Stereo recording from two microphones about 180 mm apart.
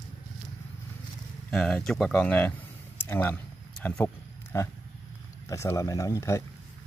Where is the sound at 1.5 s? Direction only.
5° left (ahead or behind).